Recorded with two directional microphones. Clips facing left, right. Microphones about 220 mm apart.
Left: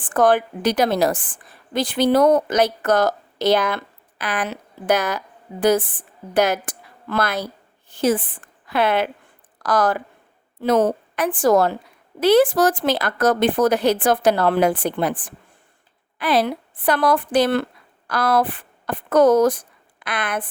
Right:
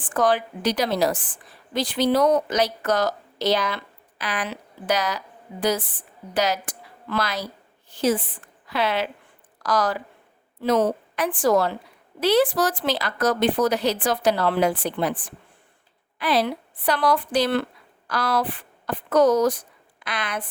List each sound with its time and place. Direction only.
0.0 s a woman's voice: 50° left (ahead or behind)